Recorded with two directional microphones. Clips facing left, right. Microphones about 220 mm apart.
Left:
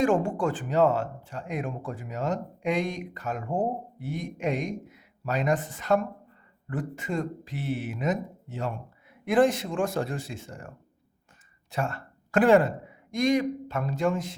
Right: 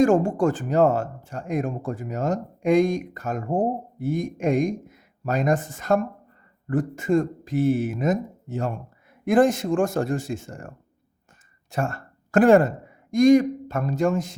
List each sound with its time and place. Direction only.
0.0 s speech: 45° right (ahead or behind)
11.7 s speech: 45° right (ahead or behind)